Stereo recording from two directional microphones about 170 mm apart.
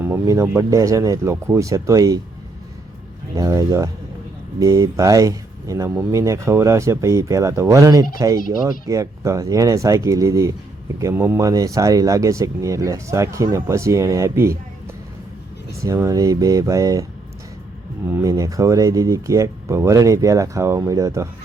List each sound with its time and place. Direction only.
0.0 s speech: 15° right (ahead or behind)
3.3 s speech: 20° right (ahead or behind)
15.7 s speech: 20° right (ahead or behind)